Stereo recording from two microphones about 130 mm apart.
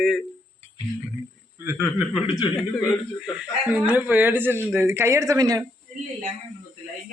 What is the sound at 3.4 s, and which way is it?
Speech, 10° right (ahead or behind).